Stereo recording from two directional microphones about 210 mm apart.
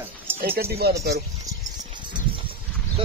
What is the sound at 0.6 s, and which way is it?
Speech, 50° right (ahead or behind).